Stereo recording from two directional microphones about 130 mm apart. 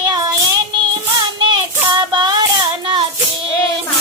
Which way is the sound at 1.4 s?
35° right (ahead or behind).